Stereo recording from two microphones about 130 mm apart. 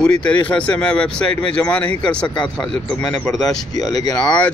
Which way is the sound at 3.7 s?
30° left (ahead or behind).